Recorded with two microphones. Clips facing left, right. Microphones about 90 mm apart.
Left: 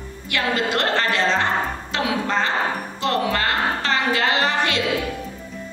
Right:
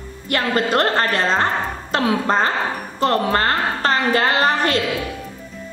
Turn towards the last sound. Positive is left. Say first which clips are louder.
# right 3 dB
turn(degrees=-40)  # may be behind; listen again after turning